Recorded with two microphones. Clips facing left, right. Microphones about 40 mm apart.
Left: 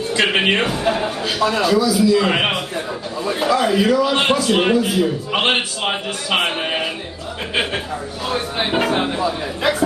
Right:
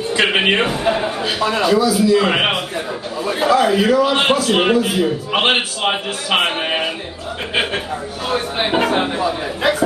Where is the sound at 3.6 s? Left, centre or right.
Centre.